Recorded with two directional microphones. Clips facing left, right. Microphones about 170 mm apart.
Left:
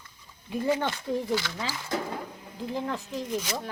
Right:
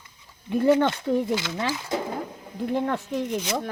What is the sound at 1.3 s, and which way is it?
Speech, 20° right (ahead or behind).